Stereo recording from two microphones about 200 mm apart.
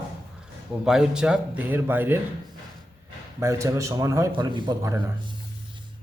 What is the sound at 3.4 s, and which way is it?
A man's voice, 15° right (ahead or behind).